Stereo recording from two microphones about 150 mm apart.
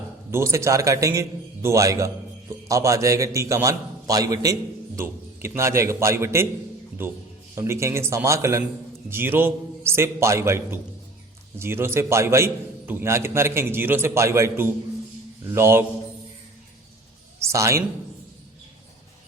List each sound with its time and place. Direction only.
0.3 s a man's voice: 20° right (ahead or behind)
7.5 s a man's voice: 20° right (ahead or behind)
17.4 s a woman's voice: 20° right (ahead or behind)